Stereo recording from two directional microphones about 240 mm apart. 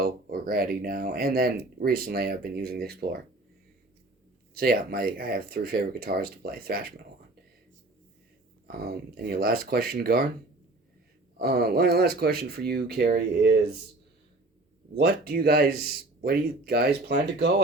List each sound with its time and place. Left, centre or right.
0.0 s speech: right
4.5 s speech: right
8.6 s speech: right
11.3 s speech: right
14.9 s speech: right